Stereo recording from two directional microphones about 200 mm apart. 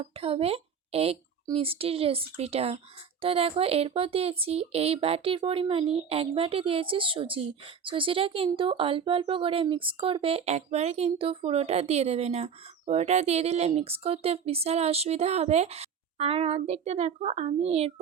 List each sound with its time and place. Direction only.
0.0 s speech: 30° right (ahead or behind)